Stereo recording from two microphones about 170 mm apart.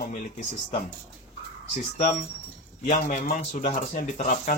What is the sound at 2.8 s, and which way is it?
Speech, 45° left (ahead or behind).